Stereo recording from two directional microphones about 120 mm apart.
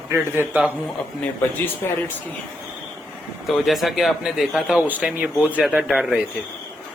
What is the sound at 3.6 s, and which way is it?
A man's voice, centre (ahead or behind).